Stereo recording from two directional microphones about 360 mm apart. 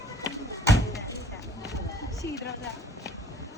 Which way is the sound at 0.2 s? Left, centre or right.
Centre.